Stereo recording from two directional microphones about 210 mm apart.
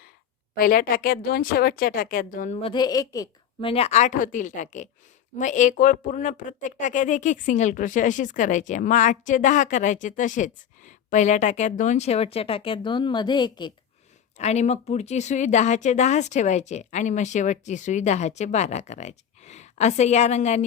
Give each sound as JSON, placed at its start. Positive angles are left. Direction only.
{"t": 0.5, "sound": "a woman's voice", "side_deg": 45}
{"t": 2.6, "sound": "a woman's voice", "side_deg": 25}
{"t": 14.3, "sound": "speech", "side_deg": 30}